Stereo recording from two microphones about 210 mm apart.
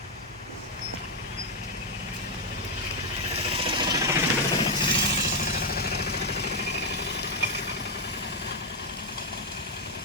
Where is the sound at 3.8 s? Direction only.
15° right (ahead or behind).